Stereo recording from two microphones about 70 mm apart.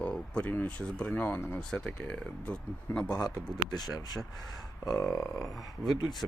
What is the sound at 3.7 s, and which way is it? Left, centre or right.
Speech, left.